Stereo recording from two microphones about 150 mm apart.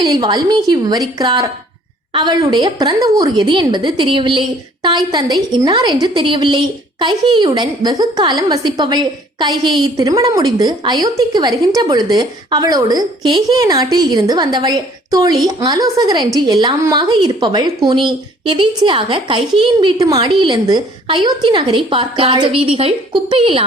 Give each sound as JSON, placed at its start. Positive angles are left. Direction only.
{"t": 0.1, "sound": "a woman's voice", "side_deg": -25}